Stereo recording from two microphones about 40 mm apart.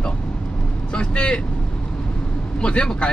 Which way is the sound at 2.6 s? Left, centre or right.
Left.